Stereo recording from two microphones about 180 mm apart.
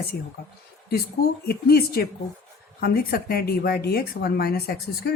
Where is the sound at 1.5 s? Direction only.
60° left (ahead or behind).